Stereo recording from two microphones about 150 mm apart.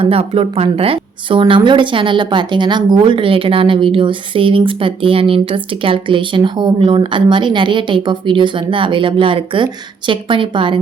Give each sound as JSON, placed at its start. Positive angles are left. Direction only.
{"t": 0.0, "sound": "a woman's voice", "side_deg": -40}